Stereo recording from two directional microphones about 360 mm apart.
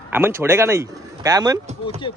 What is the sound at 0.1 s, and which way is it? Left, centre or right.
Speech, centre.